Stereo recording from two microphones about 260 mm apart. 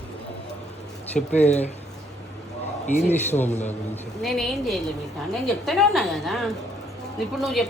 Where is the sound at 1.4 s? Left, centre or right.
Left.